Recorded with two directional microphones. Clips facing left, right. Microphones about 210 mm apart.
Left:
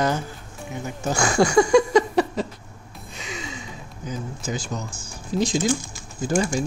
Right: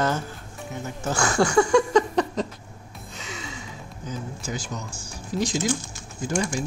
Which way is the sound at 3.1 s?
15° left (ahead or behind).